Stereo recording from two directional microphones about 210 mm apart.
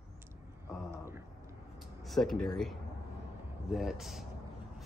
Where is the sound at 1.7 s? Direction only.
Centre (ahead or behind).